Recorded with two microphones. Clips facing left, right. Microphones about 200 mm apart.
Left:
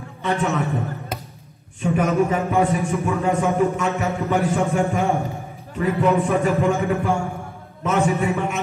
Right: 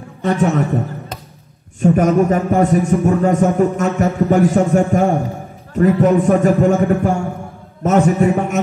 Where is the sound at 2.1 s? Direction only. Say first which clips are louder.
Right 5 dB; 45° right (ahead or behind).